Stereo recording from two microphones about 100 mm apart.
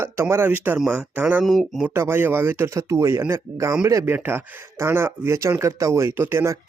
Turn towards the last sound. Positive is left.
turn(degrees=-25)  # may be behind; listen again after turning